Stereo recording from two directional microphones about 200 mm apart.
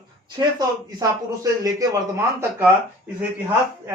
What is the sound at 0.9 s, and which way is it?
Speech, 20° right (ahead or behind).